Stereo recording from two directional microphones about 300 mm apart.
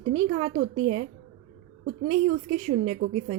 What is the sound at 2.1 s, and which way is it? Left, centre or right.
A woman's voice, right.